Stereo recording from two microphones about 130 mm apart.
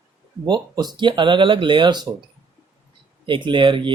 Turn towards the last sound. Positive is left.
turn(degrees=-40)  # may be behind; listen again after turning